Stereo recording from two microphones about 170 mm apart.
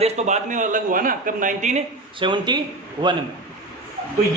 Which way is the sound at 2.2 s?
25° right (ahead or behind).